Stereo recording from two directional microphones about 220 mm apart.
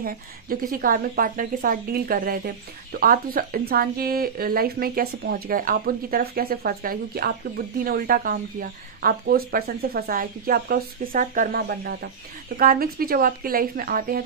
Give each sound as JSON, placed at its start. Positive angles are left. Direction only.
{"t": 0.0, "sound": "a woman's voice", "side_deg": -40}